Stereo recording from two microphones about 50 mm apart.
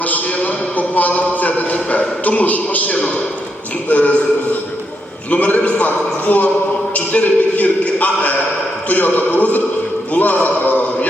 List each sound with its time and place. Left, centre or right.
0.0 s a man's voice: left
5.3 s a man's voice: left
6.9 s a sound: left